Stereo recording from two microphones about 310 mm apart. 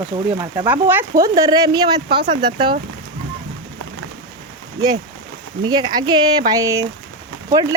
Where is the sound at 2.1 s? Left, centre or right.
Right.